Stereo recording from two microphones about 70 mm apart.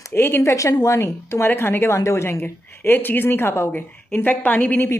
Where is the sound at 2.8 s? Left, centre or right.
Left.